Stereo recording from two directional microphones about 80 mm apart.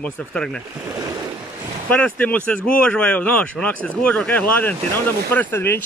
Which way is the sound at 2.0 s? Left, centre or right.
Centre.